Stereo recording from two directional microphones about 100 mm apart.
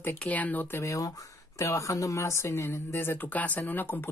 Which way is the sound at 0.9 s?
35° left (ahead or behind).